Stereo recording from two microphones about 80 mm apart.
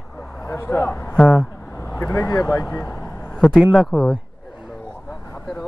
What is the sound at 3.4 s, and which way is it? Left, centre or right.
Speech, centre.